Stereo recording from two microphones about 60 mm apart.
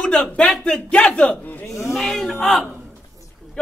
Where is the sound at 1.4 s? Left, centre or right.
Left.